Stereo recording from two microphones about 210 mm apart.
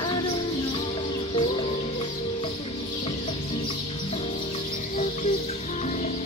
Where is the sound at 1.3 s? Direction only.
25° left (ahead or behind).